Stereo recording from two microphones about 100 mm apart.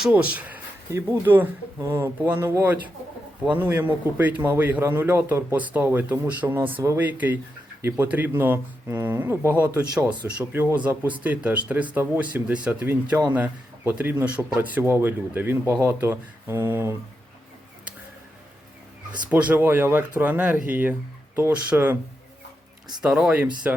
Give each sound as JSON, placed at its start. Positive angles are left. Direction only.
{"t": 0.1, "sound": "speech", "side_deg": -15}
{"t": 0.9, "sound": "a man's voice", "side_deg": -30}
{"t": 9.9, "sound": "speech", "side_deg": -10}
{"t": 10.5, "sound": "a man's voice", "side_deg": -20}
{"t": 19.3, "sound": "speech", "side_deg": -15}
{"t": 23.0, "sound": "speech", "side_deg": -10}